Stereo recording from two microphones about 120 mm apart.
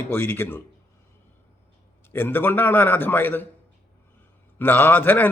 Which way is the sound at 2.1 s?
15° left (ahead or behind).